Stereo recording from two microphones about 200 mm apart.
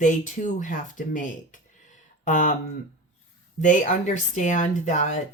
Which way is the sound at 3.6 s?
40° left (ahead or behind).